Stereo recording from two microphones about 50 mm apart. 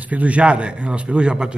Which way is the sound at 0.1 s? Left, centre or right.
Right.